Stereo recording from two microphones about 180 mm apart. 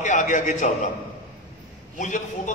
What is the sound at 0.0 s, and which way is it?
Speech, 45° left (ahead or behind).